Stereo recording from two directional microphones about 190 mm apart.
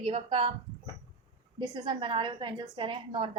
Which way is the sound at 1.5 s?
25° right (ahead or behind).